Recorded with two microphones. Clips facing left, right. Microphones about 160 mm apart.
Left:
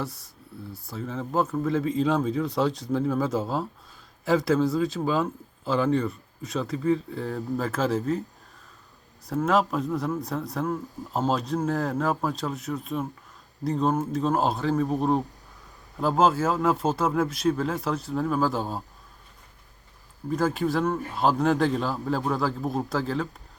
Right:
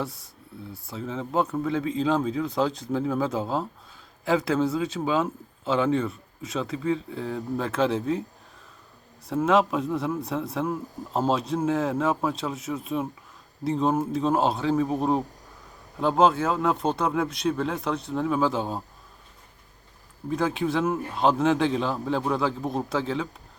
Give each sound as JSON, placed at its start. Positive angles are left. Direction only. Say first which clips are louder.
{"t": 0.0, "sound": "speech", "louder": "right 1 dB", "side_deg": 0}
{"t": 9.2, "sound": "speech", "louder": "right 2 dB", "side_deg": 0}
{"t": 20.3, "sound": "speech", "louder": "even", "side_deg": 0}